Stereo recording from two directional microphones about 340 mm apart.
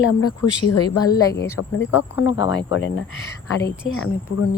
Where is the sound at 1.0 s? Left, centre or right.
Centre.